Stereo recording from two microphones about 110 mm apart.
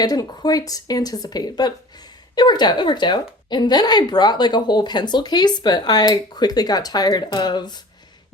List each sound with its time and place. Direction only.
0.0 s a woman's voice: 35° left (ahead or behind)